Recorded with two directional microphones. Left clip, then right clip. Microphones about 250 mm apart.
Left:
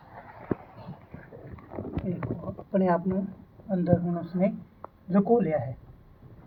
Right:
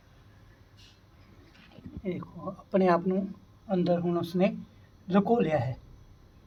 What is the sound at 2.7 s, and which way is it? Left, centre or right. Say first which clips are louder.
Speech: right 1 dB; centre.